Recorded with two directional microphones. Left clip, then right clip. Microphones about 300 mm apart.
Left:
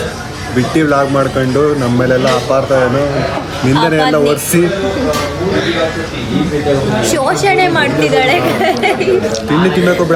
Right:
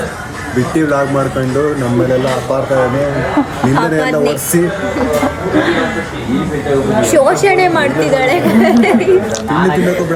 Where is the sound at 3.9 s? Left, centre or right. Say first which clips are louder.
Left 2 dB; centre.